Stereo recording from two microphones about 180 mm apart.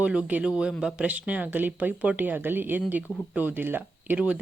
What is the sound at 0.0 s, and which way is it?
Speech, 5° right (ahead or behind).